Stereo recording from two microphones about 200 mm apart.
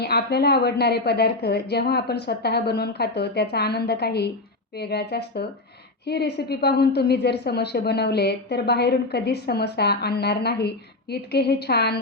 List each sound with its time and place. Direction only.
0.0 s a woman's voice: 55° left (ahead or behind)